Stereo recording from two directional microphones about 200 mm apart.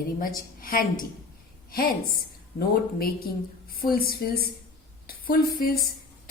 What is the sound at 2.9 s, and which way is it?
A woman's voice, 50° left (ahead or behind).